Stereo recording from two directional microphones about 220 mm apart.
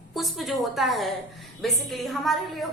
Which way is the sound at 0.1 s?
Centre (ahead or behind).